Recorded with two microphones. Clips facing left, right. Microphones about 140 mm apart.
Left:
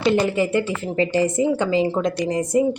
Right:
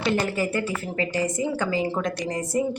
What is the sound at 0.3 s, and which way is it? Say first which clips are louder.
A woman's voice: left 5 dB; 25° left (ahead or behind).